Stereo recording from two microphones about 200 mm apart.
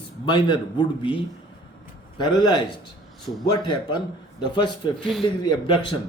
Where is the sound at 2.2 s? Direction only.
20° left (ahead or behind).